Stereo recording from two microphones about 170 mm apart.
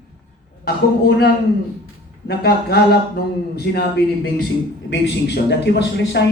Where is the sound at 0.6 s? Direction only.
75° left (ahead or behind).